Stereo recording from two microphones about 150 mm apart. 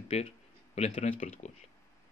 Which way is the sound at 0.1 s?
45° left (ahead or behind).